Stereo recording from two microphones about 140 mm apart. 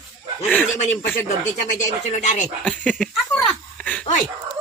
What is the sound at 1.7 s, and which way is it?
Speech, 60° left (ahead or behind).